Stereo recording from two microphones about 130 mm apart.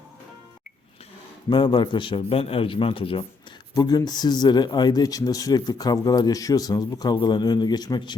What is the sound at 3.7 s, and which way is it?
Speech, 30° left (ahead or behind).